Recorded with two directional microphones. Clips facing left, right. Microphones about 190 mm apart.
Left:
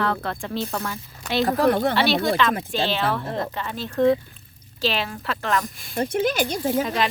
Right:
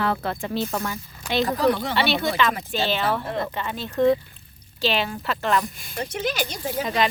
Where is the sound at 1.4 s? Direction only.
55° left (ahead or behind).